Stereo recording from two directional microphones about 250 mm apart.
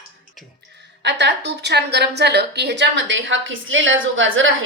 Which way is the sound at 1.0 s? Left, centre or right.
Right.